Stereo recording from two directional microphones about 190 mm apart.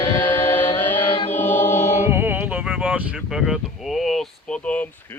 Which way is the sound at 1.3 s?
10° left (ahead or behind).